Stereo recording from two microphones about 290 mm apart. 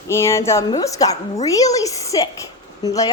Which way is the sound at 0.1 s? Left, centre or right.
Centre.